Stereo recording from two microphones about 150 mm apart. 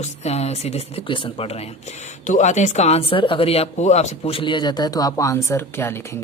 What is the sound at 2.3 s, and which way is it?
Speech, 50° left (ahead or behind).